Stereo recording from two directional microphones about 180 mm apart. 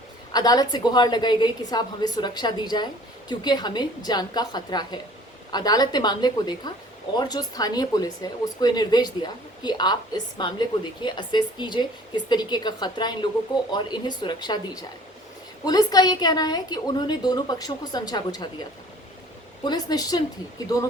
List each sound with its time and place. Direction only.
0.3 s speech: 20° left (ahead or behind)
19.6 s speech: 20° left (ahead or behind)